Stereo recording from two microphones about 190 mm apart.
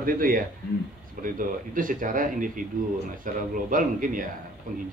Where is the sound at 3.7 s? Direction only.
45° right (ahead or behind).